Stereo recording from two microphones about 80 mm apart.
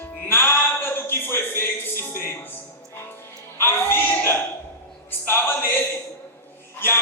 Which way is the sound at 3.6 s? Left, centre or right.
Left.